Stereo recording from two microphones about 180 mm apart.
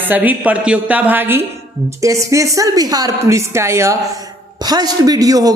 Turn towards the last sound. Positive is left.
turn(degrees=-20)  # may be behind; listen again after turning